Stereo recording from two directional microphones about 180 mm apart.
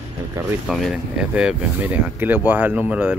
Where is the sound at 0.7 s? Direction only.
Centre (ahead or behind).